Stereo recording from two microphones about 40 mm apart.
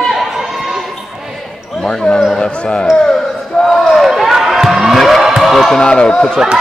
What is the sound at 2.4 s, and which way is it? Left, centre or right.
Speech, left.